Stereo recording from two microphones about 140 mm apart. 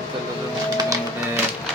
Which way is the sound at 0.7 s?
25° right (ahead or behind).